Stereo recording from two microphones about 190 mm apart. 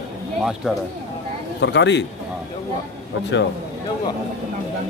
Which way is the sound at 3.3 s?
70° left (ahead or behind).